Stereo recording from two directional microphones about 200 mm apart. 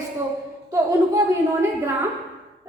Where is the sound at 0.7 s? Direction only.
15° right (ahead or behind).